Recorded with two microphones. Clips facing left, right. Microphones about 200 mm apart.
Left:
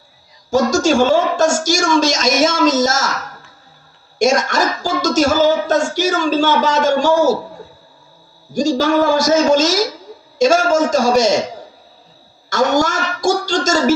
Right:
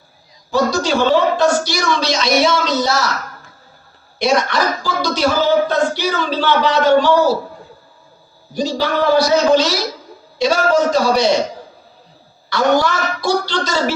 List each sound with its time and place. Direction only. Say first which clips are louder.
0.5 s speech: left 3 dB; 45° left (ahead or behind)
4.2 s speech: left 1 dB; 45° left (ahead or behind)
8.5 s speech: left 4 dB; 45° left (ahead or behind)
12.5 s speech: even; 45° left (ahead or behind)